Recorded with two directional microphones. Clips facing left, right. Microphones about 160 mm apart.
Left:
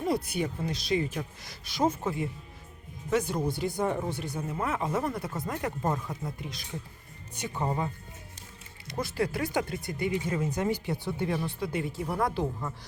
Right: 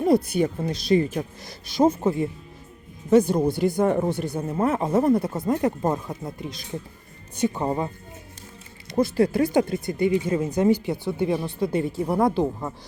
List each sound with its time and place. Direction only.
0.0 s speech: 40° right (ahead or behind)
1.5 s speech: 30° right (ahead or behind)
3.3 s speech: 50° right (ahead or behind)
4.3 s speech: 40° right (ahead or behind); by 7.9 s 20° right (ahead or behind)
8.9 s speech: 30° right (ahead or behind)